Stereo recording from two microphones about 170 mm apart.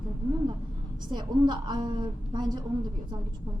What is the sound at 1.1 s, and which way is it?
A woman's voice, 25° right (ahead or behind).